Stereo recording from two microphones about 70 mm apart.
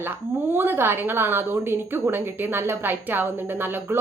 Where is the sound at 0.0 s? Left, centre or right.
Right.